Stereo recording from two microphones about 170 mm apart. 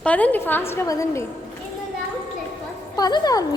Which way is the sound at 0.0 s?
10° left (ahead or behind).